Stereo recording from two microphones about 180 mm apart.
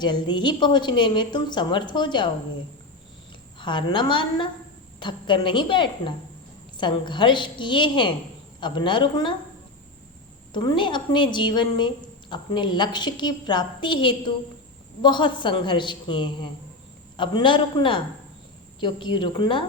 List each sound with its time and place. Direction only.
0.0 s a woman's voice: 25° left (ahead or behind)
3.6 s a woman's voice: 25° left (ahead or behind)
10.5 s a woman's voice: 25° left (ahead or behind)